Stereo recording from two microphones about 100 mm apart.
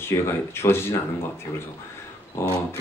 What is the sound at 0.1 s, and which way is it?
Speech, 25° left (ahead or behind).